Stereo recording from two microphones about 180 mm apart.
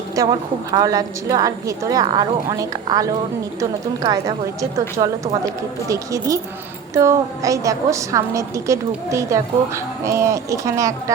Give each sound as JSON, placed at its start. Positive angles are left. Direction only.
{"t": 0.2, "sound": "a woman's voice", "side_deg": -20}